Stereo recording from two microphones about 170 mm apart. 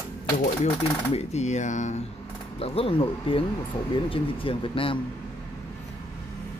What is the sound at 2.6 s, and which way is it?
Speech, 35° left (ahead or behind).